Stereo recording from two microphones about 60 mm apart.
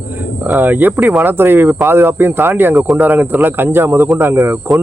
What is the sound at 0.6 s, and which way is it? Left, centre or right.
Speech, right.